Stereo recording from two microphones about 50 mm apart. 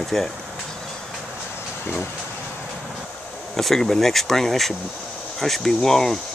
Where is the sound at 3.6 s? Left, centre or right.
Centre.